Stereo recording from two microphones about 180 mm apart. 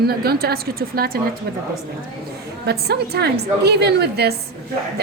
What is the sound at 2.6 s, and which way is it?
A woman's voice, 65° right (ahead or behind).